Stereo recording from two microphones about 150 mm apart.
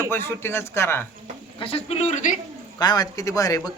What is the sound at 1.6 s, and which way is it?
Speech, 40° left (ahead or behind).